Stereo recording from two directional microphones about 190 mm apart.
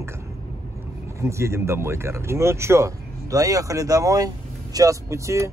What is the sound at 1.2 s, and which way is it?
Speech, 15° right (ahead or behind).